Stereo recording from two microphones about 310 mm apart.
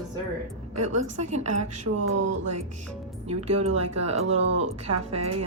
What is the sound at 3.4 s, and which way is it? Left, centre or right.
Speech, right.